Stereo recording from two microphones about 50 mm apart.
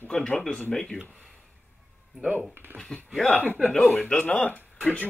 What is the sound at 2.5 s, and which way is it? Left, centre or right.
Speech, right.